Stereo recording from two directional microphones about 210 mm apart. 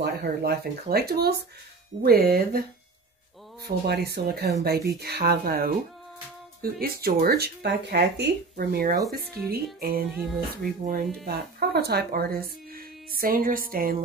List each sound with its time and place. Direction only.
0.0 s speech: 50° right (ahead or behind)
3.6 s speech: 50° right (ahead or behind)